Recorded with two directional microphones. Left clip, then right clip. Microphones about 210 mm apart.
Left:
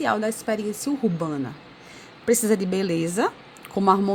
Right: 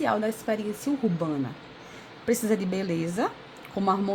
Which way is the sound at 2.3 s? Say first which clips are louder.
Left 5 dB; 15° left (ahead or behind).